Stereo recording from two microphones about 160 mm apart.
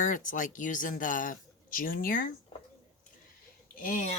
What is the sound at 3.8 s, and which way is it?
Speech, 55° left (ahead or behind).